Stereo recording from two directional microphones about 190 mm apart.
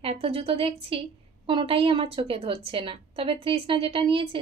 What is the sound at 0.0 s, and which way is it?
A woman's voice, 30° right (ahead or behind).